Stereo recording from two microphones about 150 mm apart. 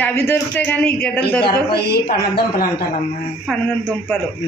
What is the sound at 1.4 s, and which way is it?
Speech, 90° left.